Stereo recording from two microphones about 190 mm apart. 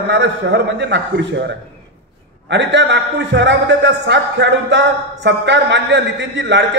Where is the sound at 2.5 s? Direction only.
65° right (ahead or behind).